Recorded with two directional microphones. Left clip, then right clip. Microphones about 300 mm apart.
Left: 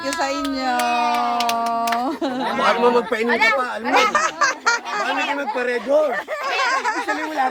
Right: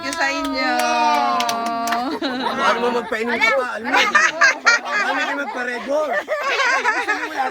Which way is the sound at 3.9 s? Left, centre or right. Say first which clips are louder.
Right 2 dB; centre.